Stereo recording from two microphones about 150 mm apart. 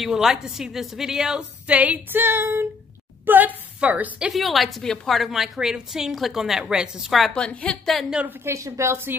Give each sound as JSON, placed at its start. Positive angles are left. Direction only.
{"t": 0.0, "sound": "a woman's voice", "side_deg": -5}
{"t": 8.5, "sound": "a woman's voice", "side_deg": -20}